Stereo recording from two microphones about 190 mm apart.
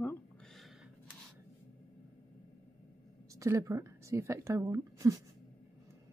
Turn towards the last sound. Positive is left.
turn(degrees=-15)  # may be behind; listen again after turning